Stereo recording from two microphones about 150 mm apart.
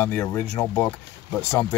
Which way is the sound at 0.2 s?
15° left (ahead or behind).